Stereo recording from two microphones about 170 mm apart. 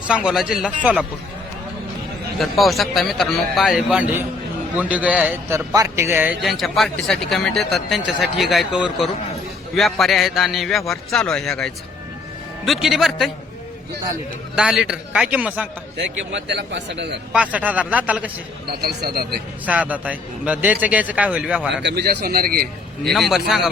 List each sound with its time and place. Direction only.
0.1 s speech: 5° right (ahead or behind)
2.4 s a man's voice: centre (ahead or behind)
6.4 s speech: centre (ahead or behind)
14.5 s speech: 5° right (ahead or behind)
16.0 s a man's voice: 90° right
17.3 s a man's voice: 10° right (ahead or behind)
18.8 s speech: 70° right (ahead or behind)
19.6 s a man's voice: 10° right (ahead or behind)
21.8 s a man's voice: 80° right; by 23.1 s 60° right (ahead or behind)
23.1 s speech: centre (ahead or behind)